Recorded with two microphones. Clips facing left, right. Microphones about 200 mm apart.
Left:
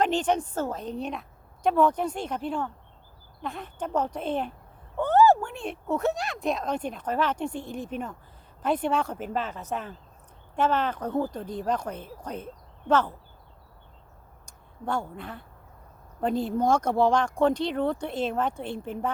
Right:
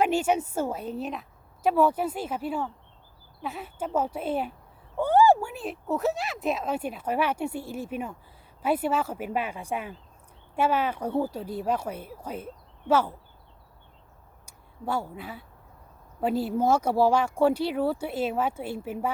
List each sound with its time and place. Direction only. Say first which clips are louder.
0.0 s speech: right 1 dB; 10° right (ahead or behind)
14.4 s speech: even; 5° right (ahead or behind)